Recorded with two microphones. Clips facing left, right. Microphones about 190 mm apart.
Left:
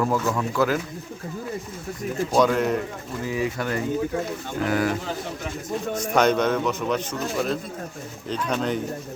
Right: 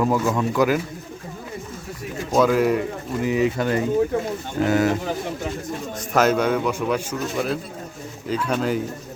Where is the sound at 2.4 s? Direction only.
5° right (ahead or behind).